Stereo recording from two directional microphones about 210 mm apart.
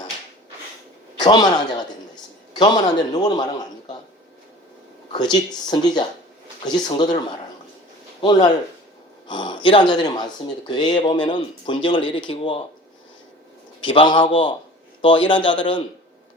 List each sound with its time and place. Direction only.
1.2 s a man's voice: 20° left (ahead or behind)
5.1 s speech: 20° left (ahead or behind)
8.2 s speech: 20° left (ahead or behind)
13.8 s speech: 25° left (ahead or behind)